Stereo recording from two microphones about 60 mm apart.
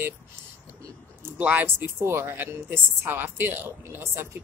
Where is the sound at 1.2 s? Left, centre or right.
Right.